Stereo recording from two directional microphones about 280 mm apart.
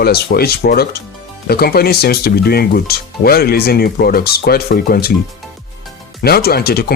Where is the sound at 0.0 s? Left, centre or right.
Left.